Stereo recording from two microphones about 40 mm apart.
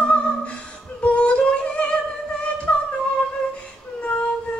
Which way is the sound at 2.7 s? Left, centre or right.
Left.